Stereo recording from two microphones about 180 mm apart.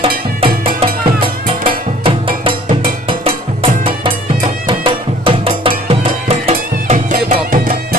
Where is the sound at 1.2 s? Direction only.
30° right (ahead or behind).